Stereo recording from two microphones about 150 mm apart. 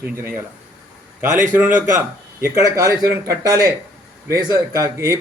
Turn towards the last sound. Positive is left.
turn(degrees=-20)  # may be behind; listen again after turning